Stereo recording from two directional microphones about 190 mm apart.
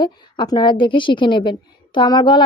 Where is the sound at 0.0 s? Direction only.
20° left (ahead or behind).